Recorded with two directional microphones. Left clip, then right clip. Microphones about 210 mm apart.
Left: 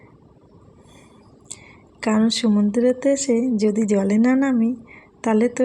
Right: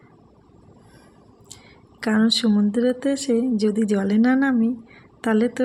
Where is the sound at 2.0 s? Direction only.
Centre (ahead or behind).